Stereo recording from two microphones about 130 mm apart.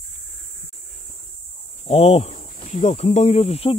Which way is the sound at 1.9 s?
55° left (ahead or behind).